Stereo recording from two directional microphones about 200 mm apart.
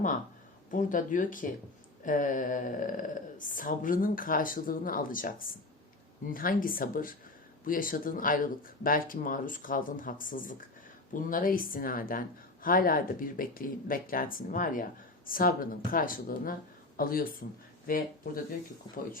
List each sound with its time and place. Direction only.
0.7 s speech: 40° left (ahead or behind)
6.3 s speech: 45° left (ahead or behind)